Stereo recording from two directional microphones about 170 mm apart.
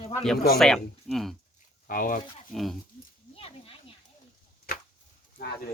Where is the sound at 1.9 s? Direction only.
55° left (ahead or behind).